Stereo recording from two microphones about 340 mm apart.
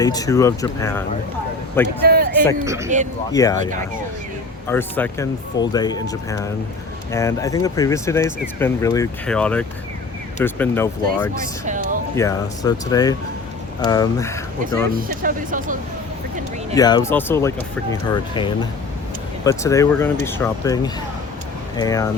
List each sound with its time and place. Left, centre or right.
0.0 s speech: centre
2.0 s a sound: right
2.6 s speech: centre
3.3 s speech: centre
4.7 s speech: centre
11.6 s a sound: right
12.1 s speech: centre
14.9 s speech: right
16.7 s speech: centre